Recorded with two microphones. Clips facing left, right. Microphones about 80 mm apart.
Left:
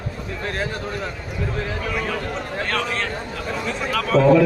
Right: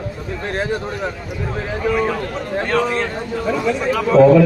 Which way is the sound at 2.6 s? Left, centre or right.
Right.